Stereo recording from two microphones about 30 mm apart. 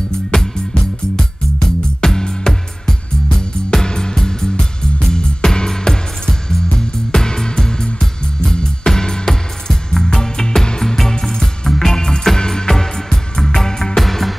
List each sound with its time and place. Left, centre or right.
0.1 s music: left
13.9 s music: centre